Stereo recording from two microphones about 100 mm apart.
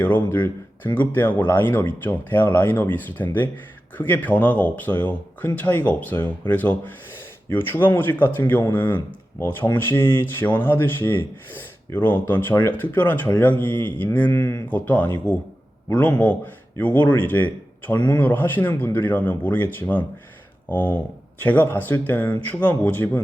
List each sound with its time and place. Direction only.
0.0 s speech: 20° left (ahead or behind)